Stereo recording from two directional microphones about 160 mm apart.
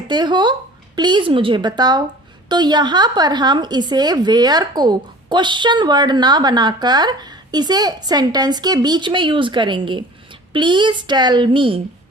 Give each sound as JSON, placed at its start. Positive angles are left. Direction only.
{"t": 0.1, "sound": "a woman's voice", "side_deg": -30}